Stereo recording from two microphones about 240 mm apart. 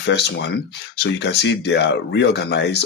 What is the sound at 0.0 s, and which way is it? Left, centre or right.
Speech, left.